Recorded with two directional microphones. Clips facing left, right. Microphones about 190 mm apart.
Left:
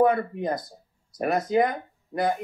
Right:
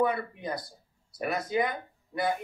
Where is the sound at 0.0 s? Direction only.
50° left (ahead or behind).